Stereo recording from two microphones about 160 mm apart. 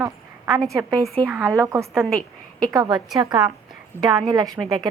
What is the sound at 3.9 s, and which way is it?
Speech, 10° left (ahead or behind).